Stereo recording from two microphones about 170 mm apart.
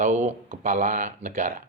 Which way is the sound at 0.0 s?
45° right (ahead or behind).